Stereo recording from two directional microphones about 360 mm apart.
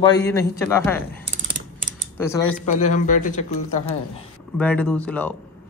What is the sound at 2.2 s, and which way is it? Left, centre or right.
Speech, centre.